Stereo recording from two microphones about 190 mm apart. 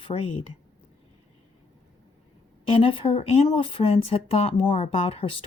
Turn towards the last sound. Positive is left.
turn(degrees=30)  # may be behind; listen again after turning